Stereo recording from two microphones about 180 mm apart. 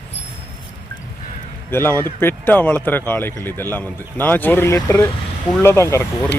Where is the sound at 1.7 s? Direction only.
15° left (ahead or behind).